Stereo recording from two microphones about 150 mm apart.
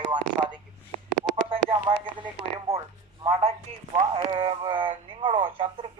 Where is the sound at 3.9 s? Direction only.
35° right (ahead or behind).